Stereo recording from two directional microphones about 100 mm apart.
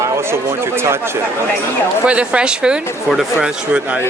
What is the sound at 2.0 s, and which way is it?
Speech, 10° right (ahead or behind).